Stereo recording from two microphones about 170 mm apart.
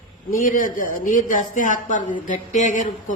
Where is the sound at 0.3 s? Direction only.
50° left (ahead or behind).